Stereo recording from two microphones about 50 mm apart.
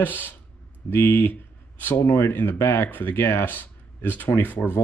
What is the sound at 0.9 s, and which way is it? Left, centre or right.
Speech, left.